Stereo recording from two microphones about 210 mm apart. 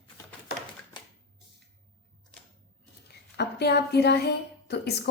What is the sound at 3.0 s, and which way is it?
A woman's voice, 50° left (ahead or behind).